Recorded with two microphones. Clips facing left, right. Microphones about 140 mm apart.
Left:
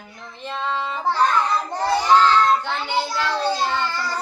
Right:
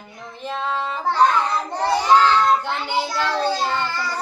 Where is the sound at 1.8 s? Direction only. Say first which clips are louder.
Right 1 dB; 20° right (ahead or behind).